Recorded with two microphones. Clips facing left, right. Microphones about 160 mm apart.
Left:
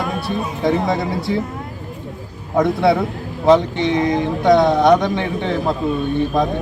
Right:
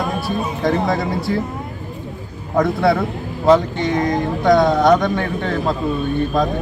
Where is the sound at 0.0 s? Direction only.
Centre (ahead or behind).